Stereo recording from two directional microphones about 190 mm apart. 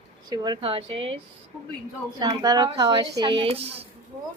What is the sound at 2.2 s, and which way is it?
A woman's voice, 20° right (ahead or behind).